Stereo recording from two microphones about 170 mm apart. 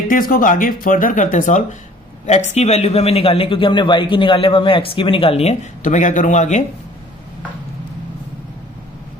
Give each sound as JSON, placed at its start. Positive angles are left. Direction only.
{"t": 0.1, "sound": "speech", "side_deg": 55}